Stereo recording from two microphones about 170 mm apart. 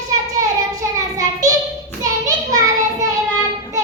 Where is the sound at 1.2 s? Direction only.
20° right (ahead or behind).